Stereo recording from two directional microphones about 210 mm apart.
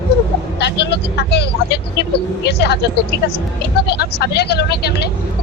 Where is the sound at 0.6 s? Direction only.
55° left (ahead or behind).